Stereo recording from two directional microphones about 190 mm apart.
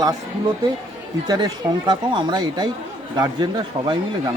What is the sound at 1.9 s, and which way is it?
A man's voice, 25° right (ahead or behind).